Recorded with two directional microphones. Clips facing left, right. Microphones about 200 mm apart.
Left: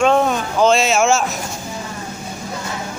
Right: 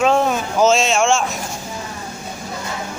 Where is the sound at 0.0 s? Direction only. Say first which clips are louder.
Left 1 dB; centre (ahead or behind).